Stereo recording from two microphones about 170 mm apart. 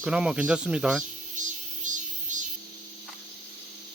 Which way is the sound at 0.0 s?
5° right (ahead or behind).